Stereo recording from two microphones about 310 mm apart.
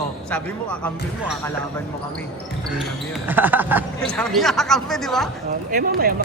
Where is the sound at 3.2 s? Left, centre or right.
Centre.